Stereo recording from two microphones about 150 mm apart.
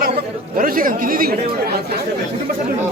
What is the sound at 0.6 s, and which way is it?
Speech, 70° right (ahead or behind).